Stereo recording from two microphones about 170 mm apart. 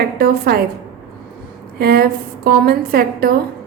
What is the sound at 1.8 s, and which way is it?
A woman's voice, 65° right (ahead or behind).